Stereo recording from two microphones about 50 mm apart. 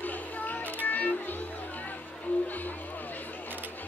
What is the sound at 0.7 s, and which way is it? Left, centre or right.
Music, left.